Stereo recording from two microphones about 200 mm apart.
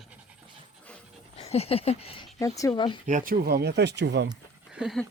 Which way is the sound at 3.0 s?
40° right (ahead or behind).